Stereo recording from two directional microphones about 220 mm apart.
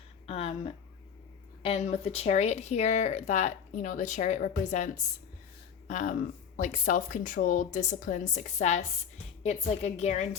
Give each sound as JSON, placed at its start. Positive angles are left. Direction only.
{"t": 0.3, "sound": "speech", "side_deg": 25}
{"t": 5.9, "sound": "speech", "side_deg": 35}